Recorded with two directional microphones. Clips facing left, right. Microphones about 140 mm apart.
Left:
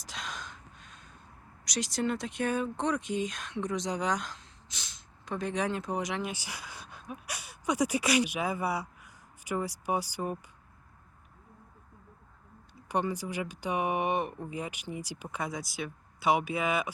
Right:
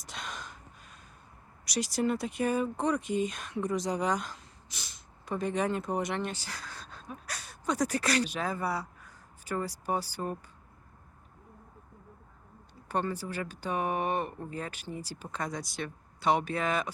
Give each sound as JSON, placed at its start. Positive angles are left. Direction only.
{"t": 0.0, "sound": "gasp", "side_deg": 0}
{"t": 1.6, "sound": "speech", "side_deg": -5}
{"t": 6.3, "sound": "speech", "side_deg": 10}
{"t": 12.9, "sound": "speech", "side_deg": 15}